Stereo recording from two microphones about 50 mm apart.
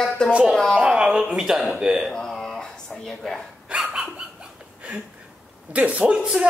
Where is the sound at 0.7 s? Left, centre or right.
Centre.